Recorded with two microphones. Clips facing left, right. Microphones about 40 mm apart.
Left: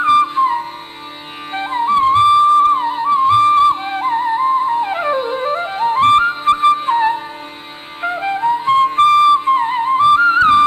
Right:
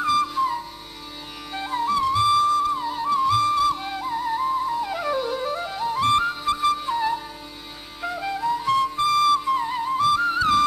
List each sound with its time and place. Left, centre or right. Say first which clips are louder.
0.0 s flute: left 9 dB; left